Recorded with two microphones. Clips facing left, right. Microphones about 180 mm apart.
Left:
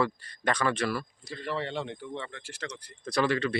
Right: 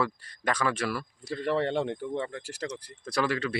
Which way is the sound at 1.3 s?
55° right (ahead or behind).